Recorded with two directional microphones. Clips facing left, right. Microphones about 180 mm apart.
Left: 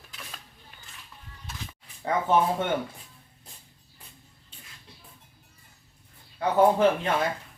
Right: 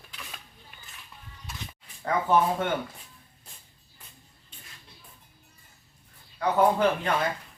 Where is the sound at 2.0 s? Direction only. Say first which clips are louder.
Even; 25° left (ahead or behind).